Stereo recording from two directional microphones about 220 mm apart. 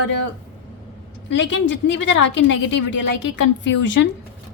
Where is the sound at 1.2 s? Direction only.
55° left (ahead or behind).